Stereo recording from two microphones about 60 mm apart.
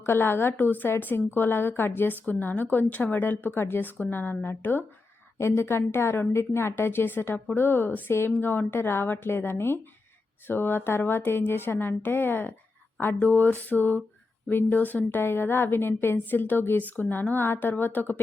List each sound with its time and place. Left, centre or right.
0.0 s a woman's voice: left
13.0 s a sound: left
14.5 s a woman's voice: left